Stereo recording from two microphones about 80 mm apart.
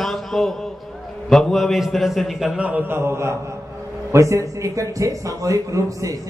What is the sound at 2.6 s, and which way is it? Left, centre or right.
A man's voice, centre.